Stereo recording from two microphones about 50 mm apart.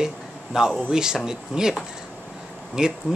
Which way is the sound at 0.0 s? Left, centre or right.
Centre.